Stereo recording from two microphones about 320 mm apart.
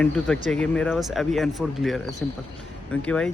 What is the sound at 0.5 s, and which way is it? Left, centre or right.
Speech, centre.